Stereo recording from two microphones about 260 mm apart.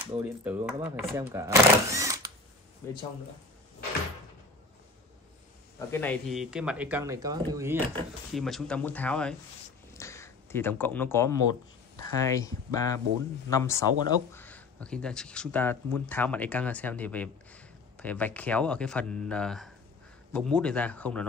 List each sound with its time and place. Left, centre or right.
0.0 s speech: centre
5.9 s speech: centre
7.9 s speech: centre